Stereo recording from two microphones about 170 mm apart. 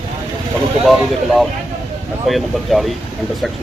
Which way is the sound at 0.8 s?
Centre (ahead or behind).